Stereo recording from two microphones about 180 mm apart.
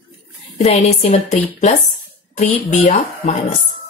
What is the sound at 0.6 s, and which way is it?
Speech, 35° left (ahead or behind).